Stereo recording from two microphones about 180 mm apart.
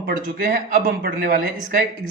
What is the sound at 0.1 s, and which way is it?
Speech, 50° right (ahead or behind).